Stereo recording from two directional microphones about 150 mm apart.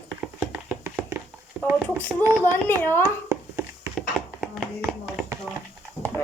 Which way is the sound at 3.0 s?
15° right (ahead or behind).